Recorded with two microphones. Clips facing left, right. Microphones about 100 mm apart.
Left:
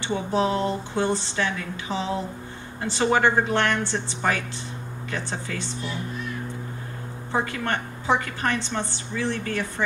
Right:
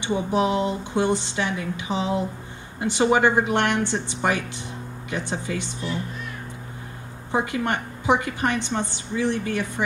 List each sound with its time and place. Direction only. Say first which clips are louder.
0.0 s a woman's voice: right 1 dB; 15° right (ahead or behind)
7.3 s a woman's voice: right 2 dB; 15° right (ahead or behind)